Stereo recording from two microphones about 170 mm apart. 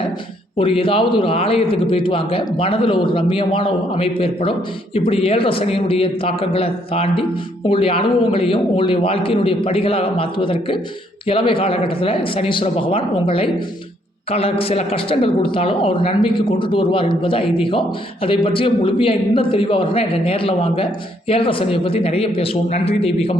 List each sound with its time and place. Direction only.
0.5 s a woman's voice: 30° left (ahead or behind)